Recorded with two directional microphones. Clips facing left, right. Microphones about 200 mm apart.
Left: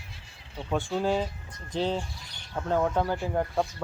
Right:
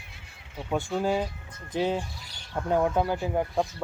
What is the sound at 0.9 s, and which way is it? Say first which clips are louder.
Speech: even; 5° right (ahead or behind).